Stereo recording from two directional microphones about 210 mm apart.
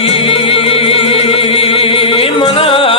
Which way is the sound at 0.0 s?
25° left (ahead or behind).